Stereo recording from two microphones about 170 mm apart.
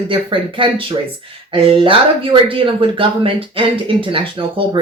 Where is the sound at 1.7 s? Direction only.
30° right (ahead or behind).